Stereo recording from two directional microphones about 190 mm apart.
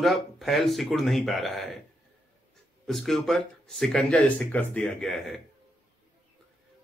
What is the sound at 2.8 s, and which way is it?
Speech, centre (ahead or behind).